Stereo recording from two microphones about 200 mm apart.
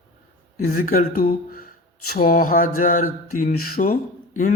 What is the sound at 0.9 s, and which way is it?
Speech, 45° left (ahead or behind).